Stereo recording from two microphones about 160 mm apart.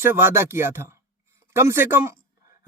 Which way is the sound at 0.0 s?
15° right (ahead or behind).